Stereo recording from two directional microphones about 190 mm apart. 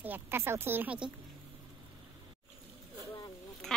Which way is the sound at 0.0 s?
10° right (ahead or behind).